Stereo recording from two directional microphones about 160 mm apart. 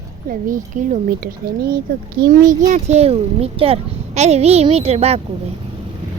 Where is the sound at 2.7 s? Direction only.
45° right (ahead or behind).